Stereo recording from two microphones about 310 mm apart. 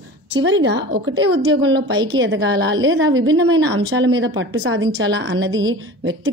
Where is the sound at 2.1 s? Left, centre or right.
Right.